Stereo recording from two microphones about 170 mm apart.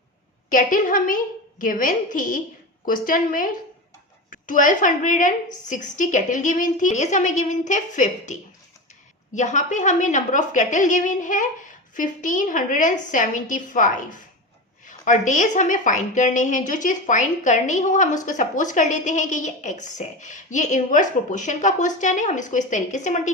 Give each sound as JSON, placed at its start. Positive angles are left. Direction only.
{"t": 0.5, "sound": "a woman's voice", "side_deg": 50}